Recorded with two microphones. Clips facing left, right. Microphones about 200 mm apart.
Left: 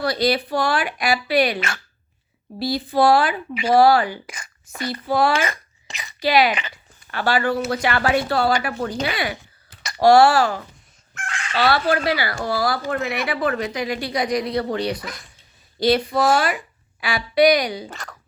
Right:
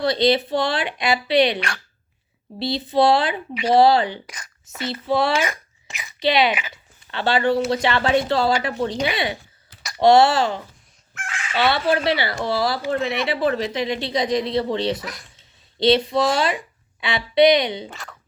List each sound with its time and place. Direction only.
0.0 s a woman's voice: 25° right (ahead or behind)
1.5 s speech: centre (ahead or behind)
2.6 s a woman's voice: 20° right (ahead or behind)
5.4 s a sound: 5° right (ahead or behind)
6.1 s a woman's voice: 25° right (ahead or behind)
11.1 s fowl: 5° right (ahead or behind)
11.6 s a woman's voice: 25° right (ahead or behind)
16.1 s speech: centre (ahead or behind)
16.4 s speech: 25° right (ahead or behind)
17.8 s speech: centre (ahead or behind)